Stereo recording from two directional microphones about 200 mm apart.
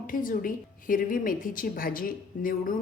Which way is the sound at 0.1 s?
45° left (ahead or behind).